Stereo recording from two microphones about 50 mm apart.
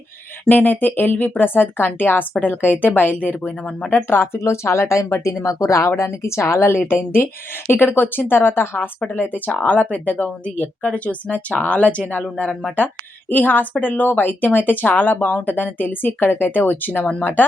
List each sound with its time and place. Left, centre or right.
0.4 s speech: left
3.8 s speech: left
6.0 s a woman's voice: left